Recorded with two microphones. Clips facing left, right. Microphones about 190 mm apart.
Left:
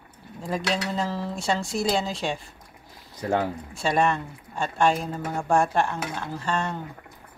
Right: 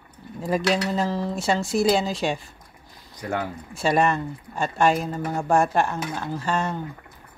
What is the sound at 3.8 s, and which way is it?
Speech, 5° right (ahead or behind).